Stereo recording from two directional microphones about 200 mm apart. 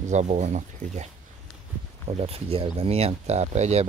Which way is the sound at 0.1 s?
35° right (ahead or behind).